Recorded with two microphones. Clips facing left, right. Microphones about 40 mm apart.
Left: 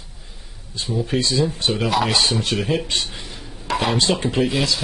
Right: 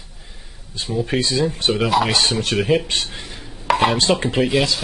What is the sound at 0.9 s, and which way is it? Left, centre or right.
Speech, centre.